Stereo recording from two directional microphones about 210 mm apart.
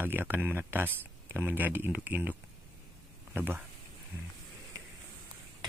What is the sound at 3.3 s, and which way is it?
Speech, 10° right (ahead or behind).